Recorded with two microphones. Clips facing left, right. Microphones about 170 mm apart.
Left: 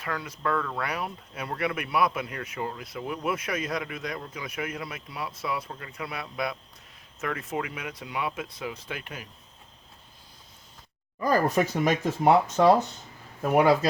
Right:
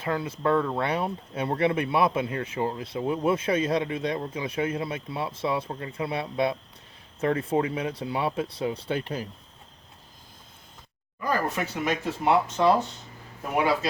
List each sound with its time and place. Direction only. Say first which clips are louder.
0.0 s speech: right 5 dB; 25° right (ahead or behind)
11.2 s speech: left 4 dB; 40° left (ahead or behind)